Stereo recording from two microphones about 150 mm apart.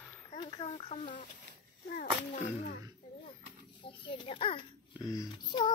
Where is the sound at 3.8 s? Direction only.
35° left (ahead or behind).